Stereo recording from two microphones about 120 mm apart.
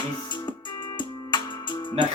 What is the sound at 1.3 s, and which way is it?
Music, 40° left (ahead or behind).